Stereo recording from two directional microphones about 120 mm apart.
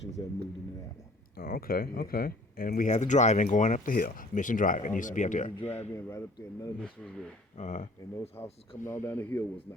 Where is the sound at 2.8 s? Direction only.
90° left.